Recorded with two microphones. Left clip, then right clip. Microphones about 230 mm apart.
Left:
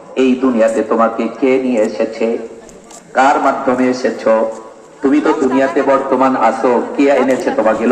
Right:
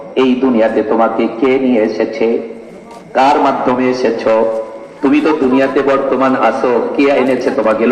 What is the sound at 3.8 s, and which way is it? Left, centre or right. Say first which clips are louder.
A man's voice: right 2 dB; right.